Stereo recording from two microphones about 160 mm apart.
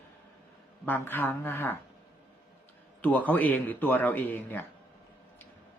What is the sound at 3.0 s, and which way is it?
A man's voice, 10° left (ahead or behind).